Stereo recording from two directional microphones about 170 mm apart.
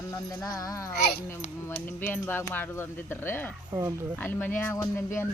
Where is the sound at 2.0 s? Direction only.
10° left (ahead or behind).